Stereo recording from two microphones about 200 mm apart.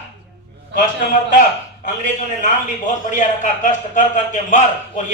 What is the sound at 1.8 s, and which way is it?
A man's voice, 40° left (ahead or behind).